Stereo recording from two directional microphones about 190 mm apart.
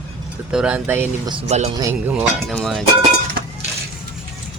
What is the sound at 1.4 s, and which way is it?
Speech, 35° right (ahead or behind).